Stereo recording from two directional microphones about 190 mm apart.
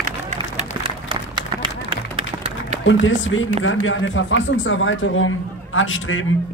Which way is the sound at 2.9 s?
85° left.